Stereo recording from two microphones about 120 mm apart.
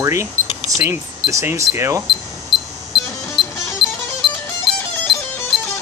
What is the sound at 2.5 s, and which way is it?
Cash register, 40° left (ahead or behind).